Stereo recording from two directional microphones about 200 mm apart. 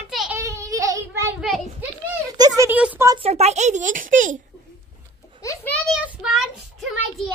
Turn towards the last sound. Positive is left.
turn(degrees=0)  # may be behind; listen again after turning